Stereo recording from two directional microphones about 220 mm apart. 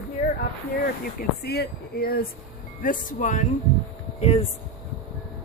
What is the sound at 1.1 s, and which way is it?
Speech, 45° left (ahead or behind).